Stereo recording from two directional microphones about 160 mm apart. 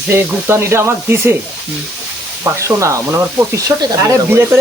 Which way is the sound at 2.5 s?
15° right (ahead or behind).